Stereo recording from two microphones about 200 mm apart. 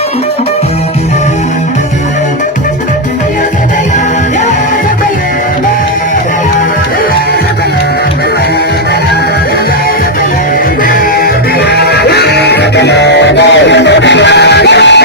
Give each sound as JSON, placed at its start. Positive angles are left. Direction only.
{"t": 11.7, "sound": "music", "side_deg": 55}